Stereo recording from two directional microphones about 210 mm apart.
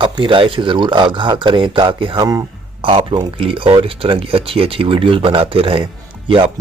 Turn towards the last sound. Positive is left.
turn(degrees=-25)  # may be behind; listen again after turning